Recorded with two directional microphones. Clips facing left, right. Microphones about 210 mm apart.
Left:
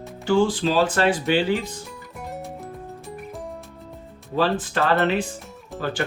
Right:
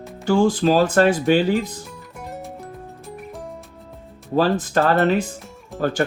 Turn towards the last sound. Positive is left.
turn(degrees=-45)  # may be behind; listen again after turning